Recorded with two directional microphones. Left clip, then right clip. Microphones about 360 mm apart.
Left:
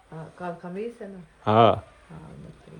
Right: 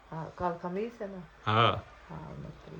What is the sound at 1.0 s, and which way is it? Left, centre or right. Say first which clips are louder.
Speech: even; centre.